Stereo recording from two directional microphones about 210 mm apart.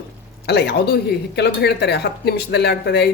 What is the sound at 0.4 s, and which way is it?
Speech, 50° left (ahead or behind).